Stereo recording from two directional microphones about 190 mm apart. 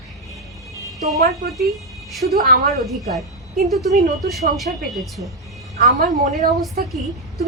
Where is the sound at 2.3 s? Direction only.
50° right (ahead or behind).